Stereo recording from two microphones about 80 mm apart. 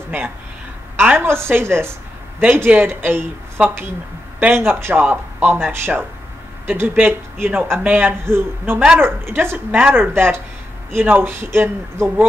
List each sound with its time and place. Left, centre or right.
1.1 s a woman's voice: right